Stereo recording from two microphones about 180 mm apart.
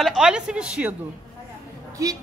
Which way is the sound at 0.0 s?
5° right (ahead or behind).